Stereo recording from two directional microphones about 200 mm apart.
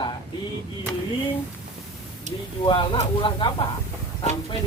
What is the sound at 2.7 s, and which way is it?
Speech, 25° left (ahead or behind).